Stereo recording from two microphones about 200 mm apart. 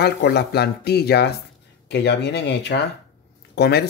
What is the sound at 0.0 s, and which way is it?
Speech, 55° left (ahead or behind).